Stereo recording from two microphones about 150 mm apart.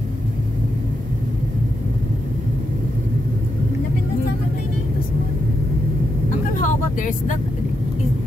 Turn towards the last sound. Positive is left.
turn(degrees=60)  # may be behind; listen again after turning